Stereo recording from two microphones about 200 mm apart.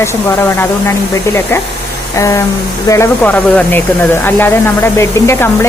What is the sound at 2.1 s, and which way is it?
Speech, 15° left (ahead or behind).